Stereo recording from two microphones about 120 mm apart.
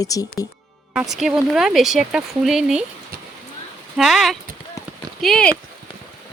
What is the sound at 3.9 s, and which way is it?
Speech, centre (ahead or behind).